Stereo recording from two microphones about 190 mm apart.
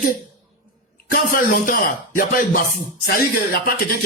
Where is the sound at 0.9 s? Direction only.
45° left (ahead or behind).